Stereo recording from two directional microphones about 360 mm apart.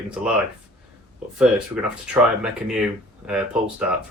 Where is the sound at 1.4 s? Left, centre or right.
Centre.